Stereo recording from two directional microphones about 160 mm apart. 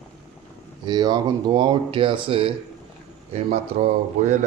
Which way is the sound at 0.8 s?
25° right (ahead or behind).